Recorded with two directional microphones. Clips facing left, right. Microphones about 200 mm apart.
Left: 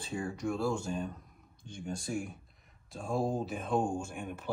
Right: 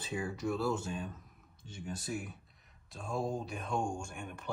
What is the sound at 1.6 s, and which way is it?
Speech, 5° right (ahead or behind).